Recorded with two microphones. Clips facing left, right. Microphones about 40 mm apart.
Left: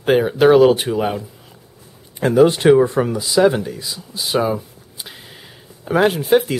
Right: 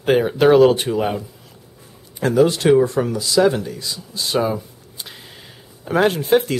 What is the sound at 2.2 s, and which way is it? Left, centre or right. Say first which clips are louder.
Speech: left 3 dB; centre.